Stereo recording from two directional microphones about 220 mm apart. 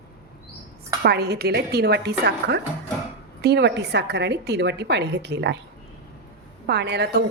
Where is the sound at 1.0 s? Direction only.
50° right (ahead or behind).